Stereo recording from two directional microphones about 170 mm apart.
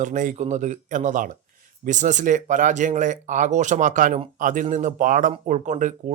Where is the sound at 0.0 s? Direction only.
50° right (ahead or behind).